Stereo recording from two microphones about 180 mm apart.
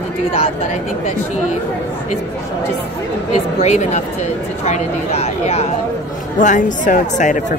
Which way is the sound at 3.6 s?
40° left (ahead or behind).